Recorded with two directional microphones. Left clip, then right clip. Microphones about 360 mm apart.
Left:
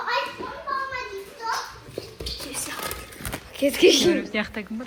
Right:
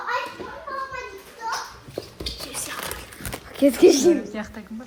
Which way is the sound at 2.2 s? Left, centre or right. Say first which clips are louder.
Left 1 dB; centre.